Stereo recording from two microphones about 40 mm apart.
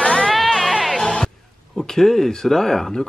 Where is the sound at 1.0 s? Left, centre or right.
Centre.